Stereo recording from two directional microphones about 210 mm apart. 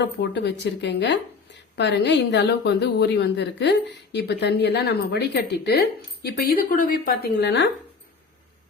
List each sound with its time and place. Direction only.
0.0 s a woman's voice: 55° left (ahead or behind)